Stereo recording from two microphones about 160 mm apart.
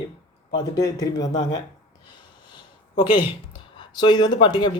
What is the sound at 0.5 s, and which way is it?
Speech, 25° left (ahead or behind).